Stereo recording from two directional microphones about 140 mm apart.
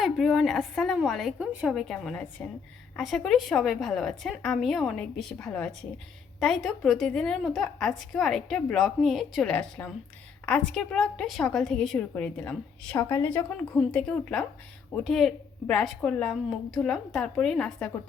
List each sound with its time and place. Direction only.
0.0 s a woman's voice: centre (ahead or behind); by 13.4 s 20° left (ahead or behind)
13.7 s a woman's voice: 5° left (ahead or behind)